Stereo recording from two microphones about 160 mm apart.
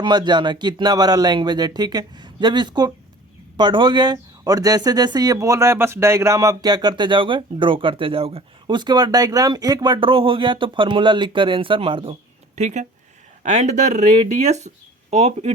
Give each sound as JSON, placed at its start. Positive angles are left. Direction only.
{"t": 0.0, "sound": "speech", "side_deg": -25}
{"t": 12.5, "sound": "speech", "side_deg": -45}